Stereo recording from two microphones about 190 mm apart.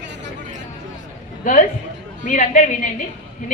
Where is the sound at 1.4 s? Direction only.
45° left (ahead or behind).